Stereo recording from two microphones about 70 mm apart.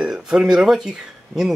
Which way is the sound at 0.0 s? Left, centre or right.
Centre.